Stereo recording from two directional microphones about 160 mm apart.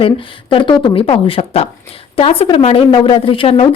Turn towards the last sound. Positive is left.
turn(degrees=35)  # may be behind; listen again after turning